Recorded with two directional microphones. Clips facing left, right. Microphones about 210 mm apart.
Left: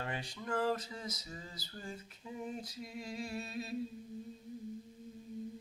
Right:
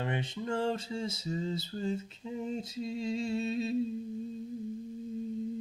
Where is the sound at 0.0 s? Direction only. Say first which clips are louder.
Right 7 dB; 25° right (ahead or behind).